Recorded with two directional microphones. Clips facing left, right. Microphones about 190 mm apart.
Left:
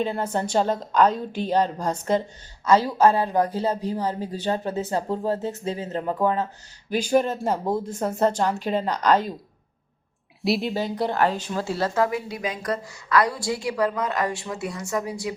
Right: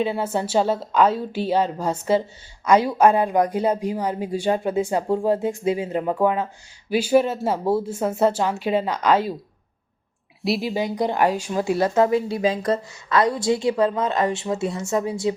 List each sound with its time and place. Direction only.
0.0 s speech: 10° right (ahead or behind)
10.4 s a woman's voice: centre (ahead or behind)
10.8 s a woman's voice: 15° right (ahead or behind)